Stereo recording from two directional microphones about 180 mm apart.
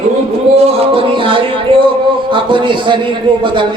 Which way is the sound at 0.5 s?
30° right (ahead or behind).